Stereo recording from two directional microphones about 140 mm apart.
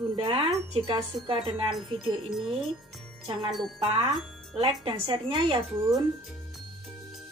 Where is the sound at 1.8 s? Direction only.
Centre (ahead or behind).